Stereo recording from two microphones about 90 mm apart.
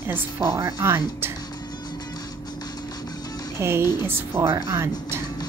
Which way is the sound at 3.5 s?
30° right (ahead or behind).